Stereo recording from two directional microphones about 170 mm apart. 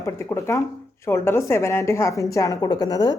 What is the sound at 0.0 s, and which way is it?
A woman's voice, 15° left (ahead or behind).